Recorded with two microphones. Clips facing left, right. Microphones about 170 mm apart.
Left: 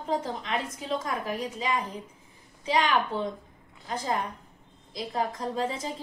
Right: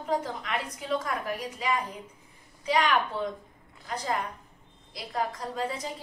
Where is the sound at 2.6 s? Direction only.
25° left (ahead or behind).